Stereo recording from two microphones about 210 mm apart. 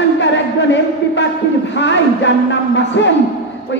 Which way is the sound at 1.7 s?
60° left (ahead or behind).